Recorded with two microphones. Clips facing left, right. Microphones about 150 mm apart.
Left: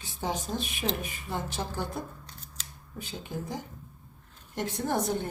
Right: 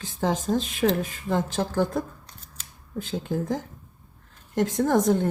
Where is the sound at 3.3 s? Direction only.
90° right.